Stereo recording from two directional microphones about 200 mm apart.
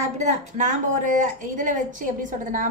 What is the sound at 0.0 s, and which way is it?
A woman's voice, 35° right (ahead or behind).